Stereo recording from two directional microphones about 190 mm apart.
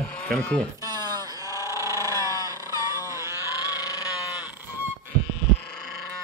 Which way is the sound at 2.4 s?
15° right (ahead or behind).